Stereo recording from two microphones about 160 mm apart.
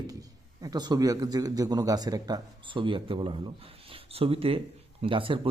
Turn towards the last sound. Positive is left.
turn(degrees=-35)  # may be behind; listen again after turning